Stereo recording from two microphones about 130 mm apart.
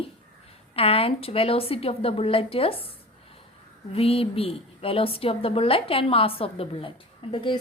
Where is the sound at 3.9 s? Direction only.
45° left (ahead or behind).